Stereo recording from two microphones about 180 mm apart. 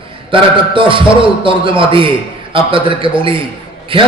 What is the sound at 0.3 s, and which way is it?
A man's voice, 30° right (ahead or behind).